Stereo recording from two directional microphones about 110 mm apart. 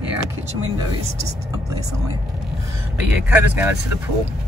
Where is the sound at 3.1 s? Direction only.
20° right (ahead or behind).